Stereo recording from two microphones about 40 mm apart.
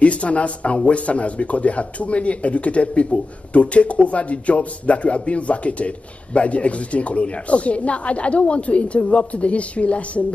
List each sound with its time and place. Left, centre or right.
0.0 s a man's voice: left